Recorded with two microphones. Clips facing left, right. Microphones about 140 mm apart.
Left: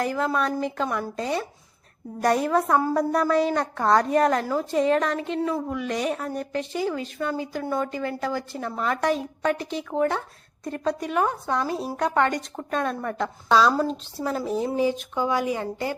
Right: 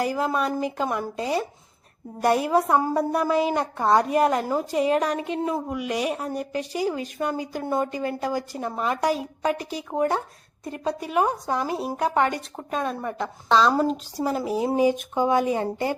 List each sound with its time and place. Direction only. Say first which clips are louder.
0.0 s a woman's voice: even; 10° right (ahead or behind)
13.5 s speech: right 1 dB; 5° left (ahead or behind)
15.1 s speech: right 3 dB; 20° right (ahead or behind)